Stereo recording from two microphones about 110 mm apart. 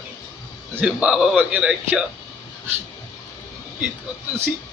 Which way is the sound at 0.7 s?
10° right (ahead or behind).